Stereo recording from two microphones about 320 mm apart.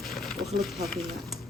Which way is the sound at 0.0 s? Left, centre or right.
Centre.